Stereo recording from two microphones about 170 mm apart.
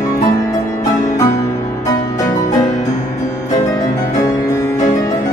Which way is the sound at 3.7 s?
20° left (ahead or behind).